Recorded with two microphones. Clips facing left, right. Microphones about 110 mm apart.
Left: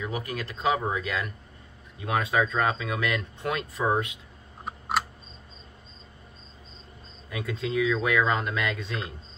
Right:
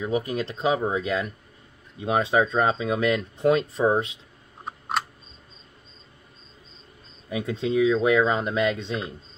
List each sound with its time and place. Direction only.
0.1 s speech: 25° right (ahead or behind)
4.6 s a sound: 5° left (ahead or behind)
7.2 s speech: 20° right (ahead or behind)